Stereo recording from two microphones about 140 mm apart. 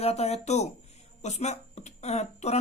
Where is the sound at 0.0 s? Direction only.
50° left (ahead or behind).